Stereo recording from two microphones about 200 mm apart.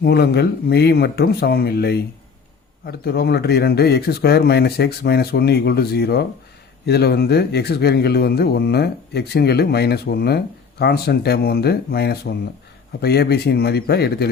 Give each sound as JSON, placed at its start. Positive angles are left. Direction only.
{"t": 0.0, "sound": "speech", "side_deg": 50}